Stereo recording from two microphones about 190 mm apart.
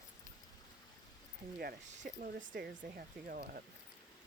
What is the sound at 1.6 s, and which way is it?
Speech, 55° right (ahead or behind).